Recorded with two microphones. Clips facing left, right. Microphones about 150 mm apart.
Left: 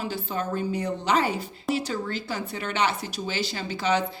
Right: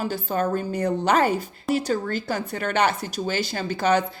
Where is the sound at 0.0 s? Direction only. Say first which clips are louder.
Right 5 dB; 45° right (ahead or behind).